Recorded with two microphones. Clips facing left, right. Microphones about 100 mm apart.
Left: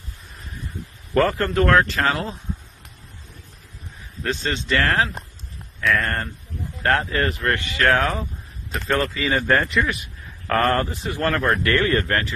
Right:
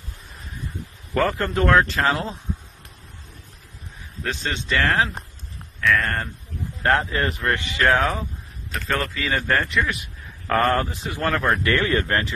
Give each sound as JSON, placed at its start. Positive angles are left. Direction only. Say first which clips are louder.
{"t": 1.1, "sound": "a man's voice", "louder": "left 3 dB", "side_deg": -5}
{"t": 4.2, "sound": "a man's voice", "louder": "left 2 dB", "side_deg": 0}
{"t": 6.8, "sound": "speech", "louder": "even", "side_deg": -15}
{"t": 7.9, "sound": "a man's voice", "louder": "even", "side_deg": -10}
{"t": 12.1, "sound": "speech", "louder": "even", "side_deg": -20}